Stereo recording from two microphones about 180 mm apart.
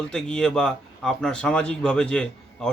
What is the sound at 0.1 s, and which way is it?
Speech, 5° left (ahead or behind).